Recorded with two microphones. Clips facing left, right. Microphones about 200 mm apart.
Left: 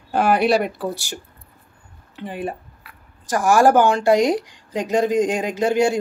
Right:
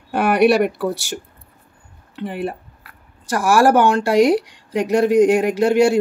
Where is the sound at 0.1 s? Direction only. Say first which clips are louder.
Right 3 dB; 65° right (ahead or behind).